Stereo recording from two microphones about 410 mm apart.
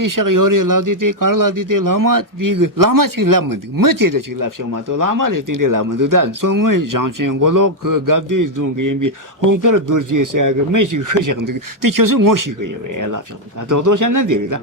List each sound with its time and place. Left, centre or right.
0.0 s speech: right
13.7 s speech: right